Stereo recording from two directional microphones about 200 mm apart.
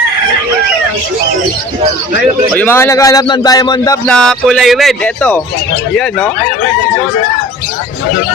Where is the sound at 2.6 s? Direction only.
10° left (ahead or behind).